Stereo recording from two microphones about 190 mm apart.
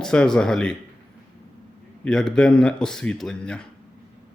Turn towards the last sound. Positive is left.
turn(degrees=5)  # may be behind; listen again after turning